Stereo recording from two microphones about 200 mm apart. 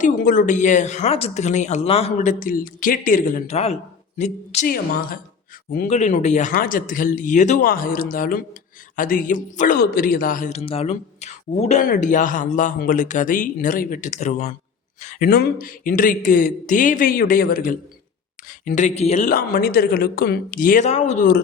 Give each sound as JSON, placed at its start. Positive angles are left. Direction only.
{"t": 0.0, "sound": "a man's voice", "side_deg": 45}